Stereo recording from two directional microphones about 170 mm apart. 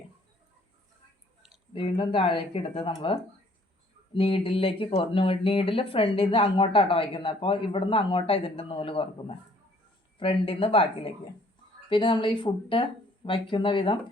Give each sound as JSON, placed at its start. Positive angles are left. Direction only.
{"t": 1.7, "sound": "speech", "side_deg": 30}